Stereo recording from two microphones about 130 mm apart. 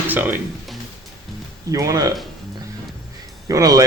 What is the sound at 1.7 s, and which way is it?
Speech, 25° right (ahead or behind).